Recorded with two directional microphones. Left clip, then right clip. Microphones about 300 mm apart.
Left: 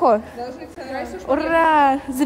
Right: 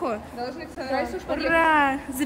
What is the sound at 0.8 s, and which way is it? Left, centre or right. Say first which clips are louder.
Speech: left 3 dB; right.